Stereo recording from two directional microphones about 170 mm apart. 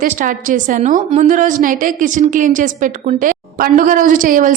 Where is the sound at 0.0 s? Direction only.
50° right (ahead or behind).